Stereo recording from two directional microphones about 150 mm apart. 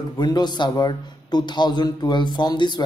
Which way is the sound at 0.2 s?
30° left (ahead or behind).